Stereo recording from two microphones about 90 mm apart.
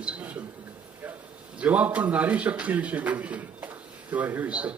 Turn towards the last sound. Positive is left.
turn(degrees=-15)  # may be behind; listen again after turning